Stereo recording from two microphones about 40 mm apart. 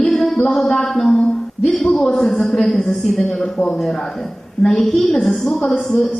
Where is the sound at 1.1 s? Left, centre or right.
Centre.